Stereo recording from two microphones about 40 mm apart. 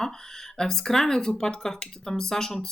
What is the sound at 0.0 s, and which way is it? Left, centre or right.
Speech, centre.